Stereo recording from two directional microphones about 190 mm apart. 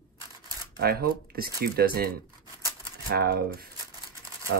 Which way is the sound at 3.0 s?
55° right (ahead or behind).